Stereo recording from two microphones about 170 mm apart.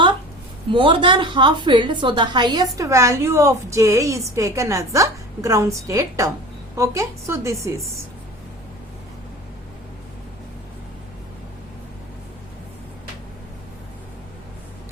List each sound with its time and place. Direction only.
0.7 s a woman's voice: 30° right (ahead or behind)